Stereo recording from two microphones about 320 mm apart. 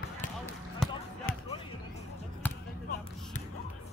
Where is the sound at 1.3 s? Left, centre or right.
Left.